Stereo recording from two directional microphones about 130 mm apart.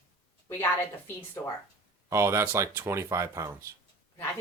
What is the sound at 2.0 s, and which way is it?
Speech, 20° right (ahead or behind).